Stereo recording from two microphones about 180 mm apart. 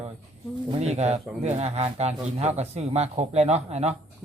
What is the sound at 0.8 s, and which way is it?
Speech, 35° right (ahead or behind).